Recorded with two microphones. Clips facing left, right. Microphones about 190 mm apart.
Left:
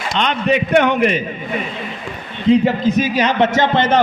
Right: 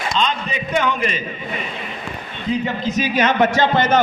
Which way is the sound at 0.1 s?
65° left (ahead or behind).